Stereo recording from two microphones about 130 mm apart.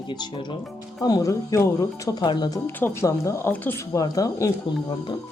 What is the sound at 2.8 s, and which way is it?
Speech, 15° left (ahead or behind).